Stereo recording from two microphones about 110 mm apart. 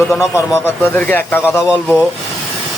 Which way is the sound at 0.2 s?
25° left (ahead or behind).